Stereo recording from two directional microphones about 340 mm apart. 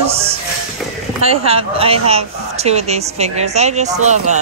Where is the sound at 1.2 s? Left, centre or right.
Centre.